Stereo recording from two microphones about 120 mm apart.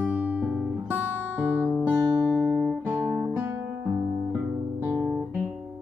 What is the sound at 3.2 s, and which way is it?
Music, 15° right (ahead or behind).